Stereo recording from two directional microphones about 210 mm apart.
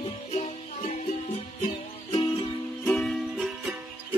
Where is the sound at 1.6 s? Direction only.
25° left (ahead or behind).